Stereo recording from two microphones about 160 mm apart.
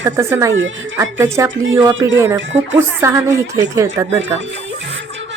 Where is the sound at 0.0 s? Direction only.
15° right (ahead or behind).